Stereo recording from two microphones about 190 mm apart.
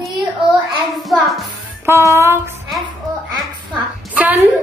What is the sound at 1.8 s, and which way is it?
Speech, 15° right (ahead or behind).